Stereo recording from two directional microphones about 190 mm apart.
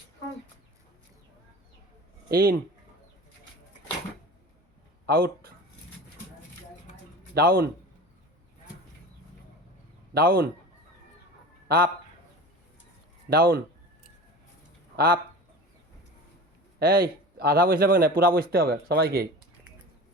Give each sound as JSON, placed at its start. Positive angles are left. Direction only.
{"t": 2.3, "sound": "a man's voice", "side_deg": -50}
{"t": 5.0, "sound": "speech", "side_deg": -55}
{"t": 7.3, "sound": "a man's voice", "side_deg": -50}
{"t": 10.2, "sound": "a man's voice", "side_deg": -55}
{"t": 13.3, "sound": "a man's voice", "side_deg": -55}
{"t": 14.9, "sound": "speech", "side_deg": -55}
{"t": 16.8, "sound": "a man's voice", "side_deg": -55}